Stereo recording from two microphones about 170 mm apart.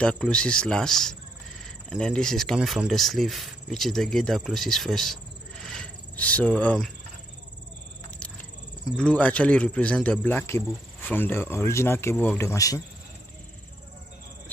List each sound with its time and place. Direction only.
0.0 s speech: 5° left (ahead or behind)
5.7 s cricket: 5° left (ahead or behind)
8.9 s speech: 5° left (ahead or behind)